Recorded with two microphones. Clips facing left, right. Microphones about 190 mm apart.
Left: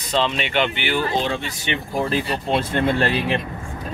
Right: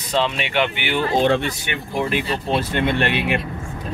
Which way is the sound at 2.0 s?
35° left (ahead or behind).